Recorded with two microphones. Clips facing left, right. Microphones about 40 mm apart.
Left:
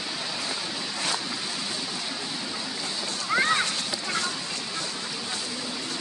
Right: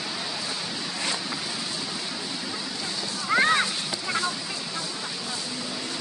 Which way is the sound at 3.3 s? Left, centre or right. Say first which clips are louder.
Right 2 dB; right.